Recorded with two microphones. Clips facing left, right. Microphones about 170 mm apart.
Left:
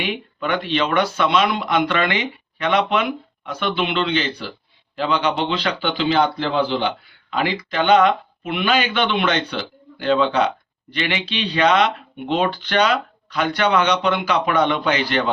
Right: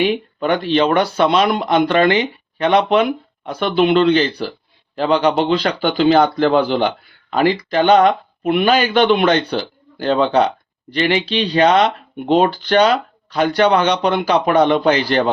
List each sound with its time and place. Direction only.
0.0 s speech: 35° right (ahead or behind)